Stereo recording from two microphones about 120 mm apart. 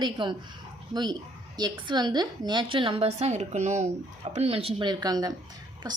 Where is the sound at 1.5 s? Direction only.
35° right (ahead or behind); by 3.8 s 70° right (ahead or behind).